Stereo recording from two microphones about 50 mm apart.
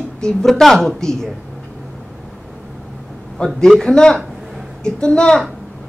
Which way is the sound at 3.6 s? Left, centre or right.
Centre.